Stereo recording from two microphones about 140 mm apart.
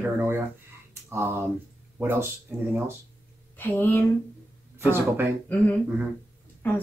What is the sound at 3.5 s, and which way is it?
Speech, 15° left (ahead or behind).